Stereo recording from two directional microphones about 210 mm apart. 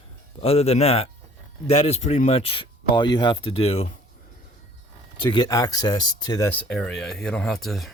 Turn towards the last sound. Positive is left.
turn(degrees=0)  # may be behind; listen again after turning